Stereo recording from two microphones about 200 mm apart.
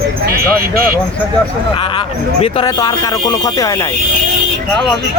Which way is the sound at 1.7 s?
25° left (ahead or behind).